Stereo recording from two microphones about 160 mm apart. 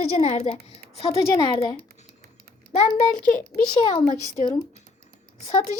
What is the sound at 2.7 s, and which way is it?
Speech, 45° left (ahead or behind).